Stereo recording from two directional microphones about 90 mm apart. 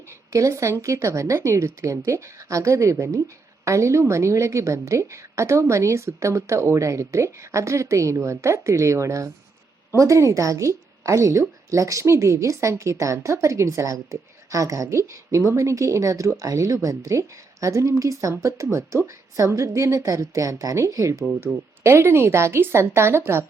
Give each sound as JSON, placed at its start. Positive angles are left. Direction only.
{"t": 0.1, "sound": "a woman's voice", "side_deg": -35}